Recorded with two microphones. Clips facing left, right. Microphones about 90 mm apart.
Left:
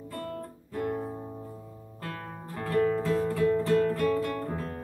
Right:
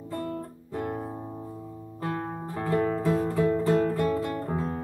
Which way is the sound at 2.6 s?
20° right (ahead or behind).